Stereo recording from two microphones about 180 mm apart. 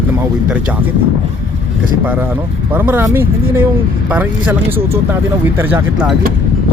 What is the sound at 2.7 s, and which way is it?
Speech, 10° right (ahead or behind).